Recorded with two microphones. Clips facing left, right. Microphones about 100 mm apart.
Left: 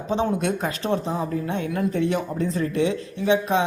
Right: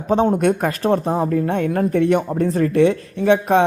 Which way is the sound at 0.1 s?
50° right (ahead or behind).